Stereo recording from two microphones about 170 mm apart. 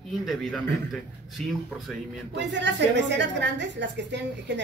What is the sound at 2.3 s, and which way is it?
A woman's voice, 90° right.